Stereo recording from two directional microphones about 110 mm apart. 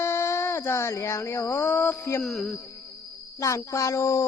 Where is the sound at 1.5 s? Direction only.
20° left (ahead or behind).